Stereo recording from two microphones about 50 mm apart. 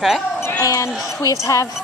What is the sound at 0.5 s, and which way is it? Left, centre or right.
Speech, left.